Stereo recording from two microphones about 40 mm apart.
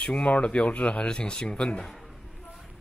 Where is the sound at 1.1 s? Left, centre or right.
Left.